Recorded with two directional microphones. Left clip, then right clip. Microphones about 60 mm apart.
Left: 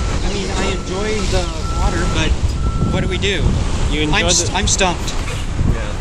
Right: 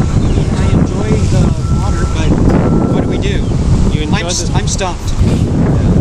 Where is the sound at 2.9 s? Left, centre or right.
Centre.